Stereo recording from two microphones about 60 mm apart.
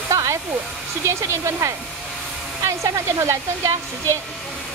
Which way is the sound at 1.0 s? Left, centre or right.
Right.